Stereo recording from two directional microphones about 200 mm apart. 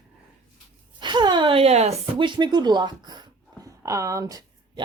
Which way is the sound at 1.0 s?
20° right (ahead or behind).